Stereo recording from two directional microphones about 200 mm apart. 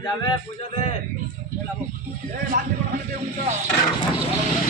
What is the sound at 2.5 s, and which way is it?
Speech, 45° right (ahead or behind).